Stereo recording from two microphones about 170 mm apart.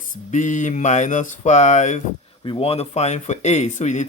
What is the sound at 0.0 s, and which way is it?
Speech, 50° left (ahead or behind).